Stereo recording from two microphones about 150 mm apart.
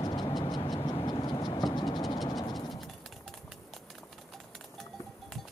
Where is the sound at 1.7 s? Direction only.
30° left (ahead or behind).